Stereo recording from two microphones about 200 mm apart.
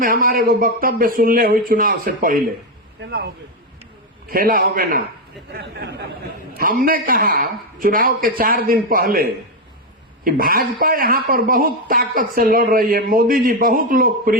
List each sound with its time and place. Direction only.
0.0 s speech: 45° right (ahead or behind)
4.3 s speech: 45° right (ahead or behind)
5.5 s speech: 55° right (ahead or behind)